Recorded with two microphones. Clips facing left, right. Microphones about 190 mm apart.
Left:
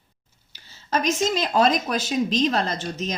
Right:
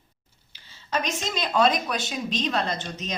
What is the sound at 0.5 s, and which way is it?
Speech, 40° left (ahead or behind).